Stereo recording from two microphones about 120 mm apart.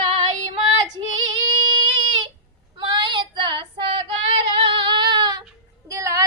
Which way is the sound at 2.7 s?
40° right (ahead or behind).